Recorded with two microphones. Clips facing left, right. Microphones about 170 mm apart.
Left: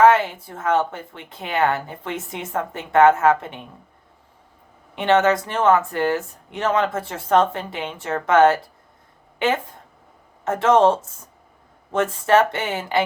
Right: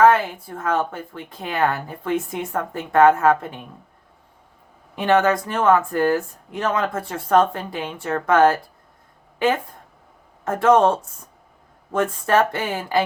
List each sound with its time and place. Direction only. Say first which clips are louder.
0.0 s a sound: left 1 dB; 25° left (ahead or behind)
0.6 s speech: left 2 dB; 20° left (ahead or behind)
4.9 s speech: even; 25° left (ahead or behind)
10.4 s speech: even; 25° left (ahead or behind)
12.2 s speech: left 3 dB; 25° left (ahead or behind)